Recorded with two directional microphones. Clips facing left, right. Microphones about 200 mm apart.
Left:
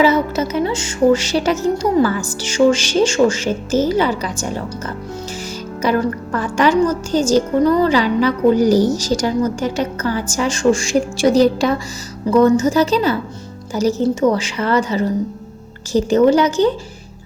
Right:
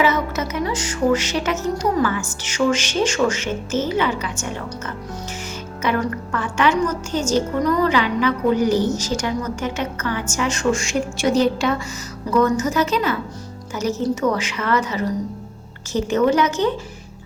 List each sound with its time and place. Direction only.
0.0 s a woman's voice: 30° left (ahead or behind)
5.8 s a woman's voice: 35° left (ahead or behind)